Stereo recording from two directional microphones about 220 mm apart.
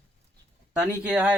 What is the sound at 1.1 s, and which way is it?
Speech, 5° right (ahead or behind).